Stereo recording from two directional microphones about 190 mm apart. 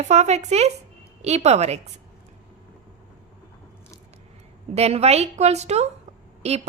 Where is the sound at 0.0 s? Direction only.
35° right (ahead or behind).